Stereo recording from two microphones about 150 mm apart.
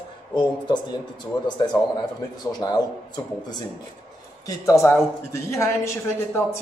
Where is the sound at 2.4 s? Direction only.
25° left (ahead or behind).